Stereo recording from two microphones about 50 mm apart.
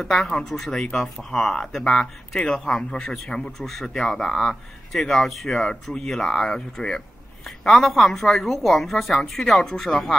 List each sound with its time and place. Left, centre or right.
0.0 s a woman's voice: centre
3.4 s speech: centre
7.4 s a woman's voice: centre